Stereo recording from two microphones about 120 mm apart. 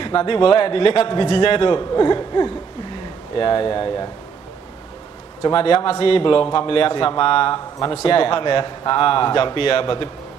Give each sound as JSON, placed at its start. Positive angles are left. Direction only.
{"t": 0.0, "sound": "a man's voice", "side_deg": 45}
{"t": 5.4, "sound": "a man's voice", "side_deg": 45}